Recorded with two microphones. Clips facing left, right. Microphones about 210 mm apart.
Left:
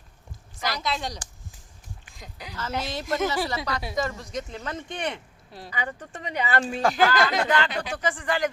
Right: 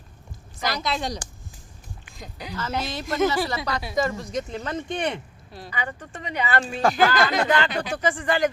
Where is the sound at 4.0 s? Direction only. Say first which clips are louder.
Right 6 dB; 5° right (ahead or behind).